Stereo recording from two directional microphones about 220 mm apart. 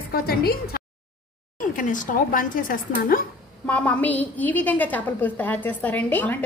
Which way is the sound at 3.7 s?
5° left (ahead or behind).